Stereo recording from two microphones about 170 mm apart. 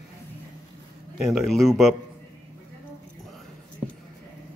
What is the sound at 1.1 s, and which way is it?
Speech, centre (ahead or behind).